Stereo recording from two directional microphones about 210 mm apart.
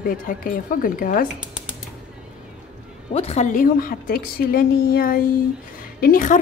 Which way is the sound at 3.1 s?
30° left (ahead or behind).